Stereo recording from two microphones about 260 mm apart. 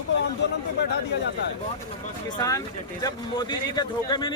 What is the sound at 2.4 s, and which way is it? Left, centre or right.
Speech, centre.